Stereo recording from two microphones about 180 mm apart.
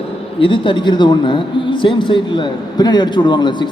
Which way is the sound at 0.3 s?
30° left (ahead or behind).